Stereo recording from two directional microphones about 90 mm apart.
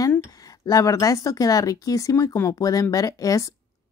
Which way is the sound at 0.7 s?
40° left (ahead or behind).